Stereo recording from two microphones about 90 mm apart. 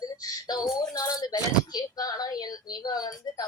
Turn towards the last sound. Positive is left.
turn(degrees=45)  # may be behind; listen again after turning